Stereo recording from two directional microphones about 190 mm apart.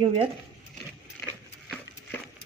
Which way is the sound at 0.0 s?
25° right (ahead or behind).